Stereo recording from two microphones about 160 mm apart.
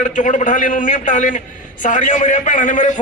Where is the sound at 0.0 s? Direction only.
50° left (ahead or behind).